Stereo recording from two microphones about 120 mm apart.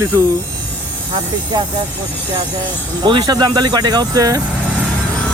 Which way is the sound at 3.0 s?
40° right (ahead or behind).